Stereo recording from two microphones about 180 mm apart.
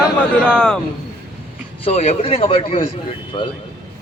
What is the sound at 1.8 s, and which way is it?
A man's voice, 35° left (ahead or behind).